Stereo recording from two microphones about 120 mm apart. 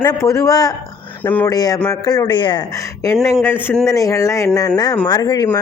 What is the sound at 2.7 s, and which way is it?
A man's voice, 25° left (ahead or behind).